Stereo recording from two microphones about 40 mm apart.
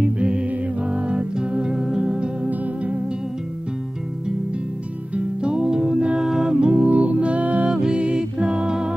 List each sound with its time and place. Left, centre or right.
0.0 s music: right
1.8 s music: centre
2.6 s music: right
5.1 s music: right
6.2 s music: centre
6.5 s music: right
6.9 s music: right
7.7 s music: right